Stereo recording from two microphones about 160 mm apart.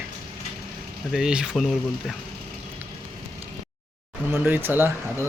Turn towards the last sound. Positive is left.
turn(degrees=-15)  # may be behind; listen again after turning